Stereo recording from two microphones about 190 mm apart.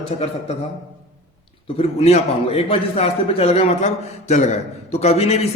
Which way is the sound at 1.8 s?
35° left (ahead or behind).